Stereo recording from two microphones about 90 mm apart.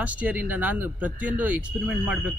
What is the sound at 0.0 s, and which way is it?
Speech, 15° right (ahead or behind).